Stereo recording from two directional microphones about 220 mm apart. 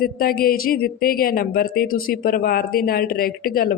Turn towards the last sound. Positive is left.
turn(degrees=40)  # may be behind; listen again after turning